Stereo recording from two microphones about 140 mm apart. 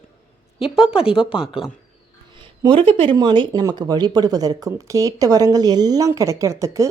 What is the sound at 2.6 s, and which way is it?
Speech, 40° right (ahead or behind).